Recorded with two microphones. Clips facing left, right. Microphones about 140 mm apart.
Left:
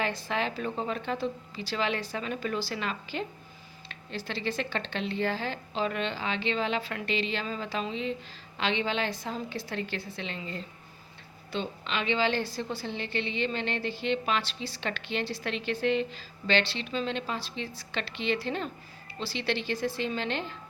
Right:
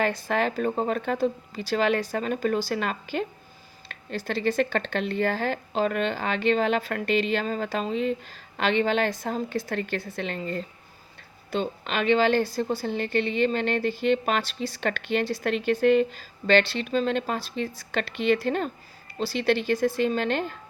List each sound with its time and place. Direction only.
0.0 s speech: 50° right (ahead or behind)